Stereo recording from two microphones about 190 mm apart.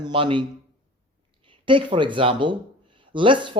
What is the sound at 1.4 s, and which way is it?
Speech, 25° right (ahead or behind).